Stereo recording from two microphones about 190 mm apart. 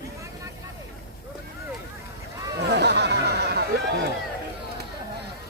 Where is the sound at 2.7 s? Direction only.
60° right (ahead or behind).